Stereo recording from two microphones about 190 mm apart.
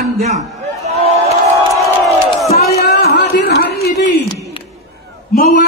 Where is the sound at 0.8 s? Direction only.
35° right (ahead or behind).